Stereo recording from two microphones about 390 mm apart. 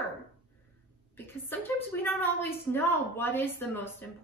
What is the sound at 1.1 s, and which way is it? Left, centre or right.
A woman's voice, centre.